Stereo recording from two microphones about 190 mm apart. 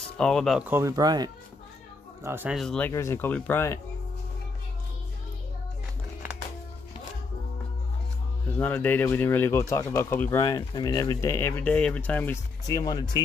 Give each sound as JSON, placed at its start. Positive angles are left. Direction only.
{"t": 0.2, "sound": "speech", "side_deg": 5}
{"t": 2.2, "sound": "speech", "side_deg": -10}
{"t": 2.9, "sound": "speech", "side_deg": 15}
{"t": 8.5, "sound": "speech", "side_deg": 10}